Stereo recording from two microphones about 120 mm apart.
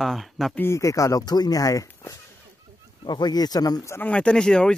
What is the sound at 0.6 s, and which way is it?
Speech, 25° left (ahead or behind).